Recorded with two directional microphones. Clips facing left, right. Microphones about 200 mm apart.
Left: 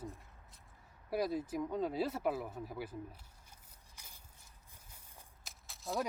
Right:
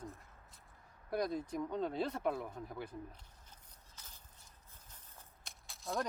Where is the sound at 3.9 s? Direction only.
10° left (ahead or behind).